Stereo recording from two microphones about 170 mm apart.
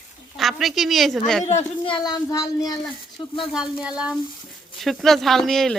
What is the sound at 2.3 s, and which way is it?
Speech, 20° left (ahead or behind).